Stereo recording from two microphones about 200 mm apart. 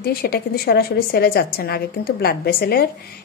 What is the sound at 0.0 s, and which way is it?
A woman's voice, 50° left (ahead or behind).